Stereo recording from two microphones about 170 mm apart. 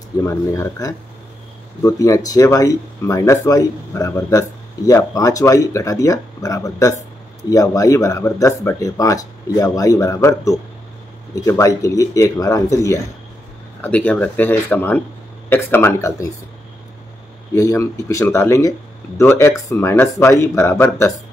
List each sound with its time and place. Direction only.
0.2 s speech: 15° left (ahead or behind)
17.6 s speech: 20° left (ahead or behind)